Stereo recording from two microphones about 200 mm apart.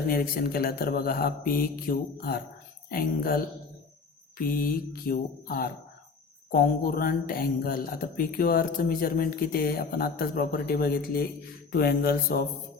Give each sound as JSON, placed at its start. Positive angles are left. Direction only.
{"t": 0.1, "sound": "speech", "side_deg": 45}
{"t": 4.4, "sound": "mantra", "side_deg": 45}
{"t": 5.0, "sound": "speech", "side_deg": 45}